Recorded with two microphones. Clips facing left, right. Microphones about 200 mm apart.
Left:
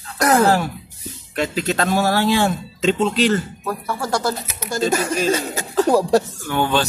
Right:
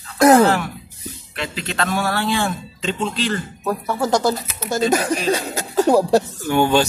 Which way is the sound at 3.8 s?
20° right (ahead or behind).